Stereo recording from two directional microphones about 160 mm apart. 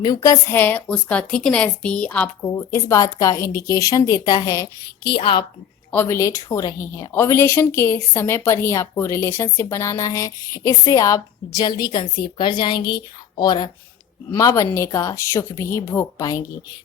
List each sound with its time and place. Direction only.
0.0 s a woman's voice: 25° left (ahead or behind)
0.5 s speech: 10° left (ahead or behind)
5.0 s a woman's voice: 35° left (ahead or behind)
5.9 s a woman's voice: 15° left (ahead or behind)